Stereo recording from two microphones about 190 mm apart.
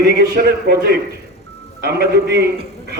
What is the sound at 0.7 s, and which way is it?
Speech, 60° right (ahead or behind).